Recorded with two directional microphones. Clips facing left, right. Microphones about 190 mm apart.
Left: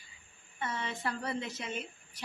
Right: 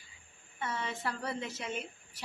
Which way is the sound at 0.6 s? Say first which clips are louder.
Even; 10° right (ahead or behind).